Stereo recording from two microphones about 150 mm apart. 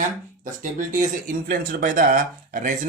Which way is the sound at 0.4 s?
60° right (ahead or behind).